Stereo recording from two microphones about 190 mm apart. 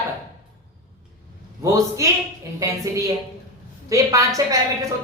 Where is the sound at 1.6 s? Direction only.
15° right (ahead or behind).